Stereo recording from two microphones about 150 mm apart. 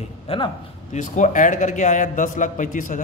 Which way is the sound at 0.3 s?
40° left (ahead or behind).